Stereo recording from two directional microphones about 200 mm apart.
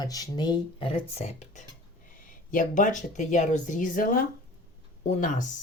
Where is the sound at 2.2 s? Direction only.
45° left (ahead or behind).